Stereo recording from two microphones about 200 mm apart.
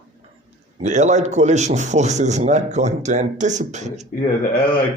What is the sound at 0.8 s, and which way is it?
A man's voice, 35° right (ahead or behind).